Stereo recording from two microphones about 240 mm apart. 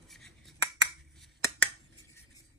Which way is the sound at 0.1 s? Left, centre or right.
Centre.